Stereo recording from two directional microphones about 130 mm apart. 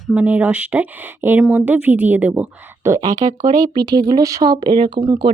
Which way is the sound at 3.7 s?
30° right (ahead or behind).